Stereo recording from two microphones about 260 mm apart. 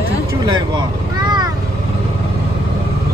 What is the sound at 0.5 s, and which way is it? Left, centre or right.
Vehicle, centre.